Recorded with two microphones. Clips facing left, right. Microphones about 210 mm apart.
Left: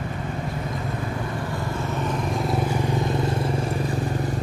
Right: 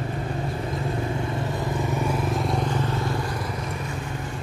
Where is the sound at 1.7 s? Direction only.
15° right (ahead or behind).